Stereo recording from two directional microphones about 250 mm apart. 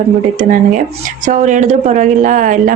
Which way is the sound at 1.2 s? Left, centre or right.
Right.